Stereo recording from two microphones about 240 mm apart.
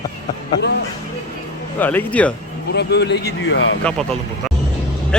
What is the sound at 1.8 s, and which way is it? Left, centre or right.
Speech, centre.